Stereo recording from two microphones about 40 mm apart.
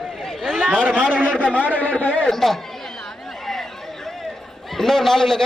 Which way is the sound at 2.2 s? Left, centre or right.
Centre.